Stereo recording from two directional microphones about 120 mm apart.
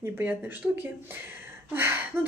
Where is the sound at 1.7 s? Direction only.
20° right (ahead or behind).